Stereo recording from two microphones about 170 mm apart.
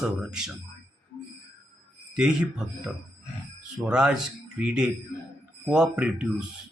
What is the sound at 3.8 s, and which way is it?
Speech, 5° right (ahead or behind).